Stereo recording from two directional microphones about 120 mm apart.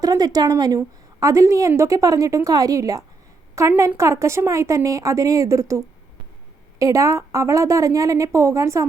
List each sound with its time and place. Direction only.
0.0 s a woman's voice: 30° right (ahead or behind)